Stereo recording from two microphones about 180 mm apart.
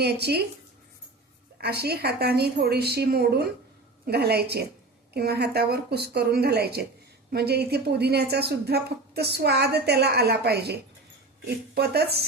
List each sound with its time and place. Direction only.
0.0 s a woman's voice: 65° right (ahead or behind)
1.5 s a woman's voice: 65° right (ahead or behind)